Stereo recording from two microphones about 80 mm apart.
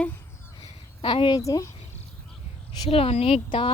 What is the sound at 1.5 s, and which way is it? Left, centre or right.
Speech, left.